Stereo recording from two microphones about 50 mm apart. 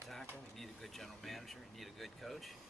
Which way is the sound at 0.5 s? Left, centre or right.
Centre.